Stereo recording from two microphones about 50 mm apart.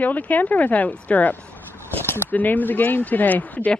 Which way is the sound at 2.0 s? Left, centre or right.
Left.